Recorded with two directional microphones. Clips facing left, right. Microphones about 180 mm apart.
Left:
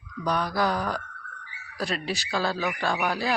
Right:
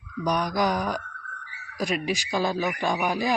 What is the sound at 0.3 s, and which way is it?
Speech, 15° right (ahead or behind).